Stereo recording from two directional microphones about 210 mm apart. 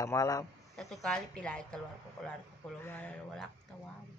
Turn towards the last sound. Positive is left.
turn(degrees=5)  # may be behind; listen again after turning